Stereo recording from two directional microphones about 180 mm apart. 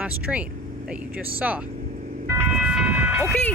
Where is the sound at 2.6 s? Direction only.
5° right (ahead or behind).